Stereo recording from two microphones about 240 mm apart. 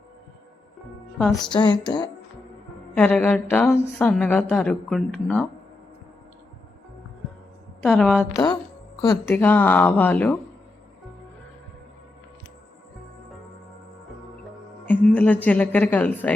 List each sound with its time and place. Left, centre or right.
1.5 s music: centre
2.9 s a woman's voice: centre
7.8 s a woman's voice: centre
9.0 s a woman's voice: centre
14.8 s a woman's voice: centre